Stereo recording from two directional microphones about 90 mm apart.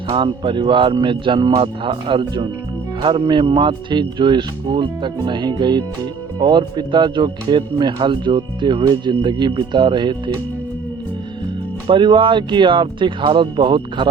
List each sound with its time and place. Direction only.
0.2 s speech: 65° right (ahead or behind)
11.9 s speech: 65° right (ahead or behind)